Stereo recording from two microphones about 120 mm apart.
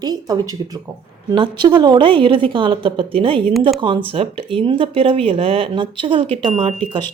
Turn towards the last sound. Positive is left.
turn(degrees=-45)  # may be behind; listen again after turning